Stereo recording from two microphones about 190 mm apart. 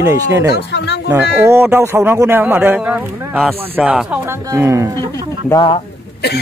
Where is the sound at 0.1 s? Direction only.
15° right (ahead or behind).